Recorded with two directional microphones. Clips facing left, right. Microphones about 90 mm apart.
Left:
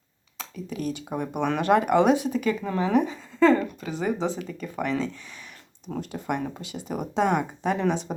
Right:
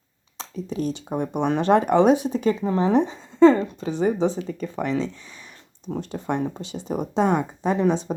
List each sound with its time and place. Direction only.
0.3 s speech: 30° right (ahead or behind)